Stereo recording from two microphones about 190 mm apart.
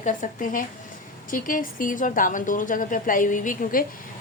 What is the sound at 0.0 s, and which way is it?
A woman's voice, 40° left (ahead or behind).